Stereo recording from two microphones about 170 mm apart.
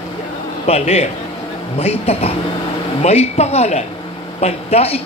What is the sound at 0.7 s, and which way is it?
A woman's voice, 40° left (ahead or behind).